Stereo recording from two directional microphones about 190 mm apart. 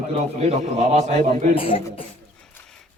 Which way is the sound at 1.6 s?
30° left (ahead or behind).